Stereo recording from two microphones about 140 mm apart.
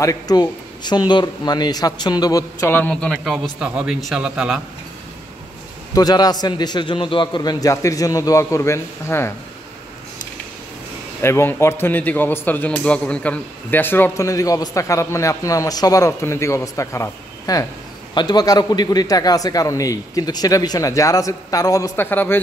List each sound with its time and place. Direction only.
0.0 s a man's voice: 25° left (ahead or behind)
2.7 s a man's voice: 10° left (ahead or behind)
3.5 s speech: 5° right (ahead or behind)
5.9 s a man's voice: 30° left (ahead or behind)
11.2 s a man's voice: 15° left (ahead or behind)